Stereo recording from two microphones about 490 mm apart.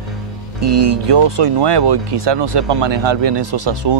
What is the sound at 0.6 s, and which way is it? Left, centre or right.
Speech, right.